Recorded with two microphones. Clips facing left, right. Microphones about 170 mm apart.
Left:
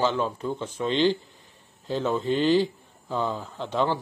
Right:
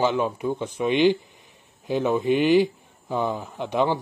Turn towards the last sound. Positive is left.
turn(degrees=-15)  # may be behind; listen again after turning